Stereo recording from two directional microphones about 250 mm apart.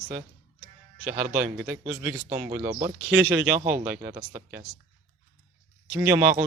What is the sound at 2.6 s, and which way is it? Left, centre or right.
Speech, right.